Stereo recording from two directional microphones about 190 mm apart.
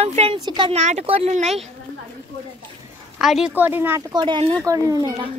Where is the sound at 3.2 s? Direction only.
5° right (ahead or behind).